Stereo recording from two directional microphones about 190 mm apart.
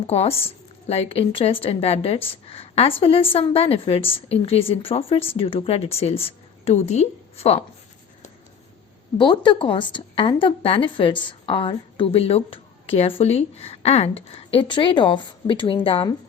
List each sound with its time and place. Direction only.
0.1 s a woman's voice: 30° left (ahead or behind)
9.1 s a woman's voice: 25° left (ahead or behind)